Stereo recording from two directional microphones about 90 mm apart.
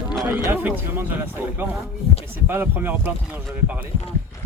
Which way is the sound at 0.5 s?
20° right (ahead or behind).